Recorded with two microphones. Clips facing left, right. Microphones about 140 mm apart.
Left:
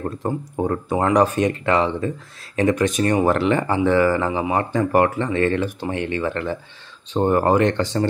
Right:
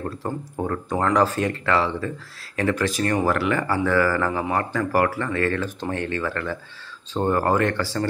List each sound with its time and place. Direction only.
0.2 s speech: 20° left (ahead or behind)